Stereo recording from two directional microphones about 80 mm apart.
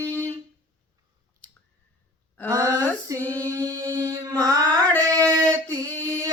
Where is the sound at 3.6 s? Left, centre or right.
Right.